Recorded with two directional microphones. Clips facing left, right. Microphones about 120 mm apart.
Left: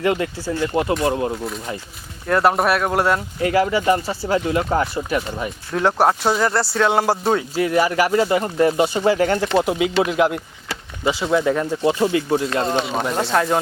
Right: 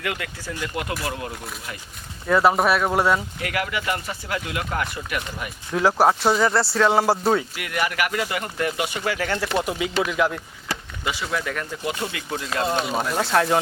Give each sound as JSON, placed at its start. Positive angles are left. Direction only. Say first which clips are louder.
{"t": 0.0, "sound": "speech", "louder": "left 9 dB", "side_deg": 30}
{"t": 2.2, "sound": "speech", "louder": "left 1 dB", "side_deg": 0}
{"t": 3.4, "sound": "speech", "louder": "left 9 dB", "side_deg": 30}
{"t": 5.7, "sound": "speech", "louder": "left 1 dB", "side_deg": 0}
{"t": 7.5, "sound": "speech", "louder": "left 9 dB", "side_deg": 30}
{"t": 12.9, "sound": "speech", "louder": "left 2 dB", "side_deg": 0}